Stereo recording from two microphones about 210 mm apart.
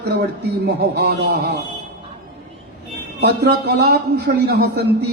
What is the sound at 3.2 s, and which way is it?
A man's voice, 55° right (ahead or behind).